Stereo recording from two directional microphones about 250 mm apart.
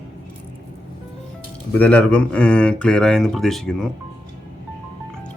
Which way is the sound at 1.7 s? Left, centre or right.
Centre.